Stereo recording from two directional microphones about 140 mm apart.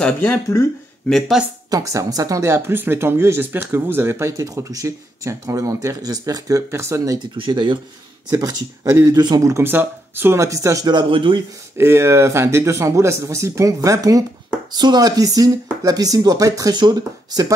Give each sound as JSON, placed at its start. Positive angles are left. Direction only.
{"t": 0.0, "sound": "speech", "side_deg": 15}
{"t": 1.0, "sound": "speech", "side_deg": 5}
{"t": 1.7, "sound": "speech", "side_deg": -25}
{"t": 7.3, "sound": "speech", "side_deg": -35}
{"t": 11.7, "sound": "speech", "side_deg": -20}